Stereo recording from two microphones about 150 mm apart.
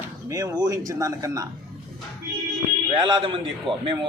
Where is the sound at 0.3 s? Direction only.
25° right (ahead or behind).